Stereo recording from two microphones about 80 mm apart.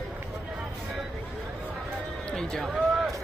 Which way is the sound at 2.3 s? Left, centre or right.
Centre.